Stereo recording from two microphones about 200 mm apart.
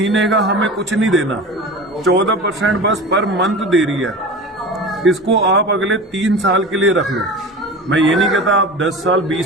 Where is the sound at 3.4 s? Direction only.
Centre (ahead or behind).